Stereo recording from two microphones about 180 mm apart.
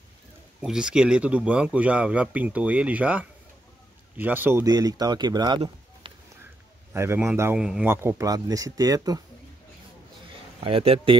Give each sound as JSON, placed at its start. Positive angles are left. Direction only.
{"t": 0.6, "sound": "a man's voice", "side_deg": -5}
{"t": 6.9, "sound": "a man's voice", "side_deg": -15}
{"t": 10.6, "sound": "speech", "side_deg": -30}